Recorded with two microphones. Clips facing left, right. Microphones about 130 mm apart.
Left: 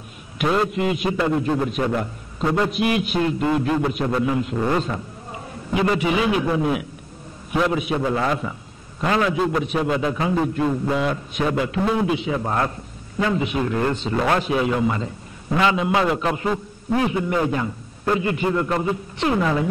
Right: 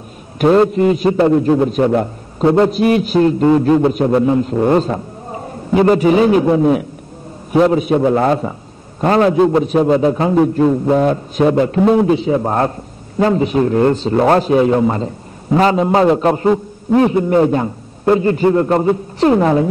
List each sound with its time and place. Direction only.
0.4 s a man's voice: 40° right (ahead or behind)